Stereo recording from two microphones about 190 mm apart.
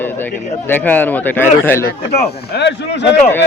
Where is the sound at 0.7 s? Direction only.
10° left (ahead or behind).